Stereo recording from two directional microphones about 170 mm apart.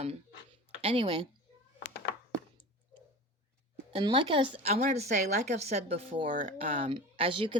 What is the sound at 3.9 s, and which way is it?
Speech, 30° right (ahead or behind).